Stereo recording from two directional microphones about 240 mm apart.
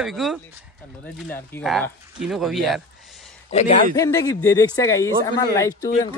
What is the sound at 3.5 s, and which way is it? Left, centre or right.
Speech, left.